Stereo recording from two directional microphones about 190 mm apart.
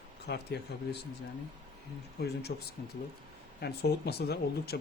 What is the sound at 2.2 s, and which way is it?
Speech, 60° left (ahead or behind).